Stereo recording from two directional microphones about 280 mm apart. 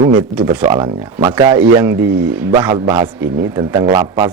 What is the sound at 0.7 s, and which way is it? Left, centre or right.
A man's voice, centre.